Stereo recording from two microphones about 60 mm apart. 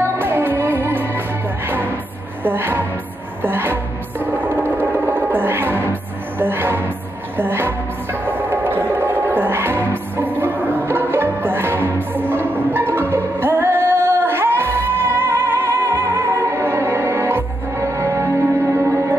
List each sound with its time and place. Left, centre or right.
0.0 s music: right
2.4 s a woman's voice: right
3.4 s music: right